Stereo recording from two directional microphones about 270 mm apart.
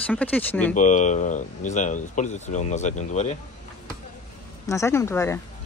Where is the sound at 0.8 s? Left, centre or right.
Left.